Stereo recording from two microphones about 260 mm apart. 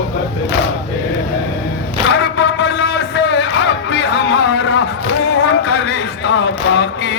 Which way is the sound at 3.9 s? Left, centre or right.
Left.